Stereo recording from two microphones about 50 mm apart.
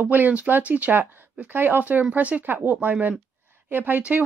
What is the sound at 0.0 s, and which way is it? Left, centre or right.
Speech, right.